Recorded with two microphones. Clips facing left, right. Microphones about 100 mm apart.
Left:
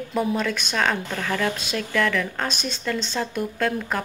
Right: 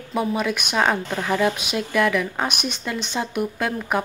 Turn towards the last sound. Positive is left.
turn(degrees=-15)  # may be behind; listen again after turning